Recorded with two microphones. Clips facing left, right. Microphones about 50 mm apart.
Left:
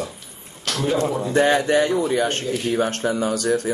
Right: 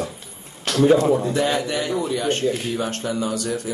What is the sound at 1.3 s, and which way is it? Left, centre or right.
Speech, left.